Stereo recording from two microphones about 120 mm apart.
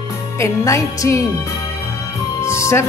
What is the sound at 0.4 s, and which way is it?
Music, 25° left (ahead or behind).